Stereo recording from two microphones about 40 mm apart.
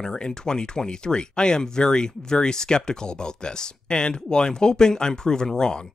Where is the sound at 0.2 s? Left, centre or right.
Left.